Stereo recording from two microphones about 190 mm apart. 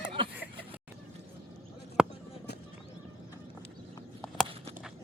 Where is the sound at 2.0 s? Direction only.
5° right (ahead or behind).